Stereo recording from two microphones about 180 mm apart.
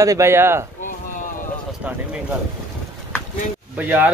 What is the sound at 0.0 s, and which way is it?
Speech, 15° right (ahead or behind).